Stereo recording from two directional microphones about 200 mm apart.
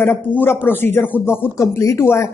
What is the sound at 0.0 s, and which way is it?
Speech, 10° left (ahead or behind).